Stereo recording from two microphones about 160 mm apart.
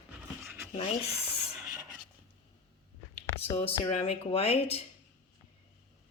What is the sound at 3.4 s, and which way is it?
Speech, 40° left (ahead or behind).